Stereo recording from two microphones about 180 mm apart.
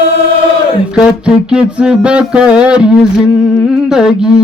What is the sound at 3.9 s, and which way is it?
Music, 5° right (ahead or behind).